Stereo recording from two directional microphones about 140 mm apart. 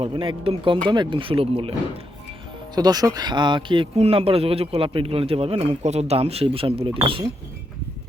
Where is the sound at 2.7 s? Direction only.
30° right (ahead or behind).